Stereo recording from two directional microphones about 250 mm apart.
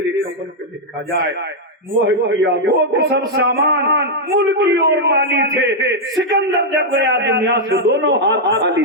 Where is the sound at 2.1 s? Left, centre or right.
Right.